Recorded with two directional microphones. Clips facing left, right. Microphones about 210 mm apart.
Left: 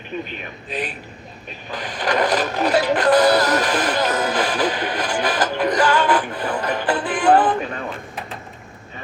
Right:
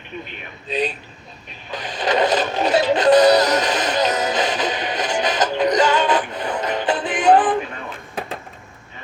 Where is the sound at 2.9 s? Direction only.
25° right (ahead or behind).